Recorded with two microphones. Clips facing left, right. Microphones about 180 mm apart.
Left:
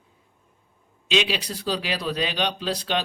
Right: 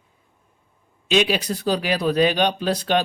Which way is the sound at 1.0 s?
50° right (ahead or behind).